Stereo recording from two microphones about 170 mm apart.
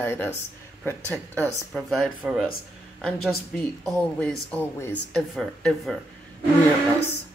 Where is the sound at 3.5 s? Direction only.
5° left (ahead or behind).